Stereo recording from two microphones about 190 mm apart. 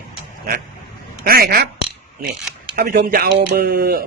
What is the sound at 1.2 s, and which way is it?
Speech, 50° right (ahead or behind).